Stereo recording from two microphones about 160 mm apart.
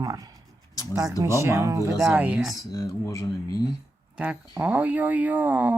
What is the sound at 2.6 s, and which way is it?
Speech, 20° left (ahead or behind).